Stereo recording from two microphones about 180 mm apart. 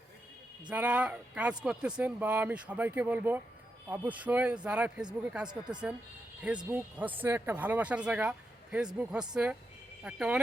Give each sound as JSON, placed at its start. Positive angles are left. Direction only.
{"t": 0.7, "sound": "speech", "side_deg": -5}
{"t": 5.5, "sound": "speech", "side_deg": -25}
{"t": 6.4, "sound": "speech", "side_deg": -5}